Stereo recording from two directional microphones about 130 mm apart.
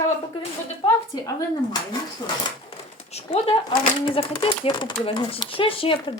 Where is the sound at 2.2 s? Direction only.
30° left (ahead or behind).